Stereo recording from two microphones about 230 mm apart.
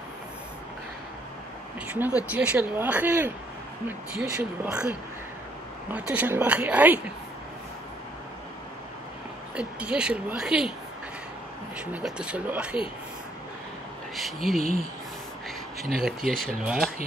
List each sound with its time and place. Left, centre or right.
2.3 s speech: centre
9.6 s speech: centre
11.8 s speech: centre
14.1 s speech: centre
15.8 s speech: centre